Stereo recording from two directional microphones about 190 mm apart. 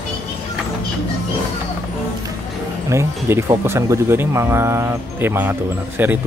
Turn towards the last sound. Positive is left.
turn(degrees=-10)  # may be behind; listen again after turning